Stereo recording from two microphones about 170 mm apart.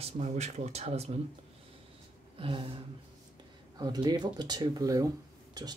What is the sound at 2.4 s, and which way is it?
Speech, 30° right (ahead or behind).